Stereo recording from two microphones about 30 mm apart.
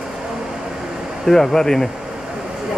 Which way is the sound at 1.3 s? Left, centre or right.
Centre.